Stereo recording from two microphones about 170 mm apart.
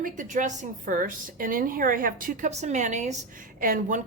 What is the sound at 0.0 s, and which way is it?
A woman's voice, 50° right (ahead or behind).